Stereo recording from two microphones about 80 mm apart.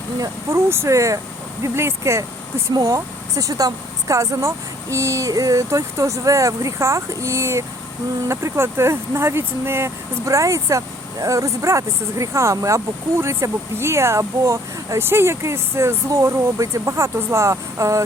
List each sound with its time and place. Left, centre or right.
0.2 s speech: right